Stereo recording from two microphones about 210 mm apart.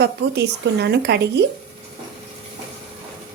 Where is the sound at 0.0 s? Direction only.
55° right (ahead or behind).